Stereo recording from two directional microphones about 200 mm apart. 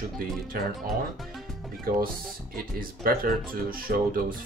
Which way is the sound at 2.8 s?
45° right (ahead or behind).